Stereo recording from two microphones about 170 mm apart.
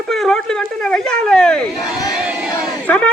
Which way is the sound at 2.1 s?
5° right (ahead or behind).